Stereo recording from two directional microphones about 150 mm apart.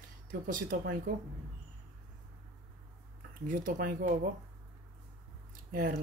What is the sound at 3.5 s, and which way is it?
Speech, 70° right (ahead or behind).